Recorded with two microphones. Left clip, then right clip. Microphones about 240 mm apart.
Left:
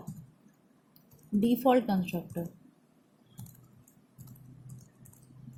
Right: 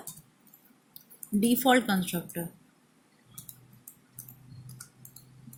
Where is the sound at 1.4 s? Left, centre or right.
Right.